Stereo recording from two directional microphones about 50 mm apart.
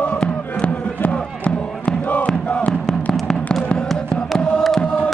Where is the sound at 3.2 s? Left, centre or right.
Centre.